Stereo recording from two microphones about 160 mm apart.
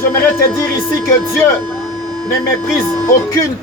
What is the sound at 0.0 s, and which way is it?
Speech, 15° left (ahead or behind).